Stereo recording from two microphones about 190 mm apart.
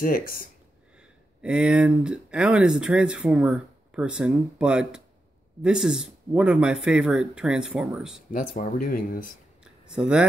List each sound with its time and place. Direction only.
0.0 s speech: 50° left (ahead or behind)
1.4 s speech: 5° right (ahead or behind)
8.3 s speech: 45° left (ahead or behind)
9.9 s speech: 5° right (ahead or behind)